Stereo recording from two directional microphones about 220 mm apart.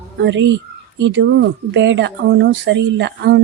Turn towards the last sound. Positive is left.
turn(degrees=-50)  # may be behind; listen again after turning